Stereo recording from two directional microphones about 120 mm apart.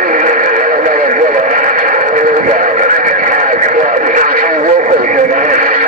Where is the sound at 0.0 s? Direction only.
90° right.